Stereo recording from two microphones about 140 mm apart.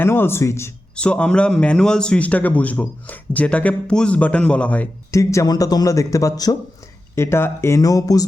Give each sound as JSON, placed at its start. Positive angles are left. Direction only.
{"t": 0.0, "sound": "a man's voice", "side_deg": 15}
{"t": 0.9, "sound": "a man's voice", "side_deg": 10}
{"t": 5.1, "sound": "a man's voice", "side_deg": 20}